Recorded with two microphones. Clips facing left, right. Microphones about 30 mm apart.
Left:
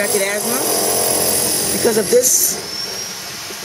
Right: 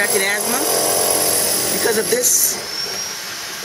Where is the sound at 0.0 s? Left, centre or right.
Centre.